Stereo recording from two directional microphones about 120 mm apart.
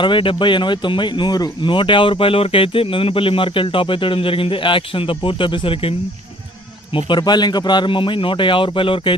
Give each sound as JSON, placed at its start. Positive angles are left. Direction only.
{"t": 0.0, "sound": "speech", "side_deg": 45}